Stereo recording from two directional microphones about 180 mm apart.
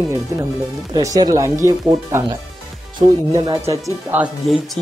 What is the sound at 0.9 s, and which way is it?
Speech, 20° right (ahead or behind).